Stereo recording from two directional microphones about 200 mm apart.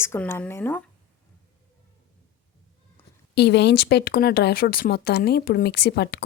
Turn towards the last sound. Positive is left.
turn(degrees=55)  # may be behind; listen again after turning